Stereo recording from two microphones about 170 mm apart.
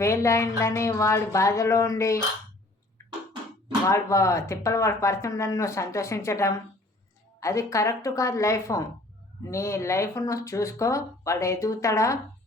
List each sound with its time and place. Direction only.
0.0 s speech: 15° left (ahead or behind)
3.0 s a sound: 15° left (ahead or behind)
3.8 s a woman's voice: 15° left (ahead or behind)